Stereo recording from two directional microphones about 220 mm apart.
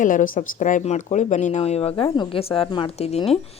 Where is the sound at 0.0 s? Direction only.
35° left (ahead or behind).